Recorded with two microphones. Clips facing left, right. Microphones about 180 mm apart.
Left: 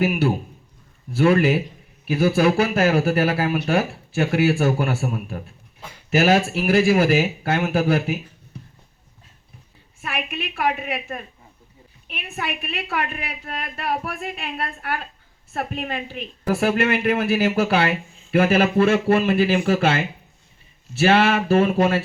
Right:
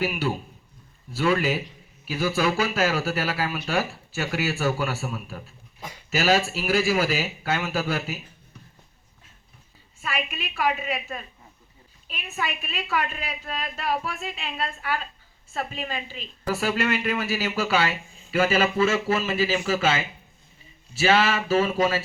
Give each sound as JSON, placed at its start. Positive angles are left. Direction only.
{"t": 0.0, "sound": "speech", "side_deg": 50}
{"t": 10.0, "sound": "a woman's voice", "side_deg": 55}